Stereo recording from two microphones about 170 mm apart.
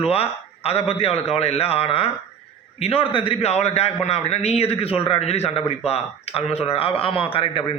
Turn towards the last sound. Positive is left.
turn(degrees=35)  # may be behind; listen again after turning